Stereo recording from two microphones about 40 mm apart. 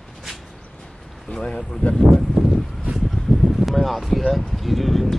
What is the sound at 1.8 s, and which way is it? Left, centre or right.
Speech, left.